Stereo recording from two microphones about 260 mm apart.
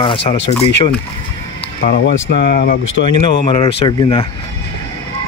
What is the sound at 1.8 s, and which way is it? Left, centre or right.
Speech, left.